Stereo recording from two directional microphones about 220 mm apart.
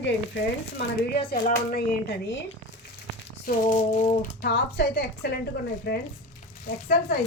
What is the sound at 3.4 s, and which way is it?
Female singing, 35° left (ahead or behind).